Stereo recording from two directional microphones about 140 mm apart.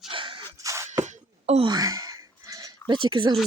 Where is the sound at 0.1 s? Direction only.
35° right (ahead or behind).